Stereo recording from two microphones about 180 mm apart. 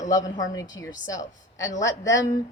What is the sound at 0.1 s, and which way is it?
A woman's voice, 20° left (ahead or behind).